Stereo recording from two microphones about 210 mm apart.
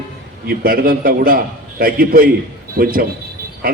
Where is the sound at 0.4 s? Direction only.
45° right (ahead or behind).